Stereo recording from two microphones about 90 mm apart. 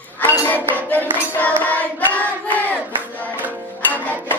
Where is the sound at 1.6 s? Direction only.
20° left (ahead or behind).